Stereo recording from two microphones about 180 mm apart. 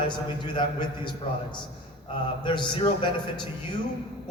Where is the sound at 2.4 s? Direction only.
25° left (ahead or behind).